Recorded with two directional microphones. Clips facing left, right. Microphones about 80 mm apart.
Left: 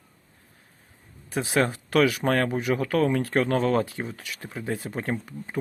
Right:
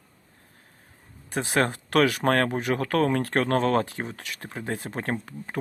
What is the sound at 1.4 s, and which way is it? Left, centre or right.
Speech, right.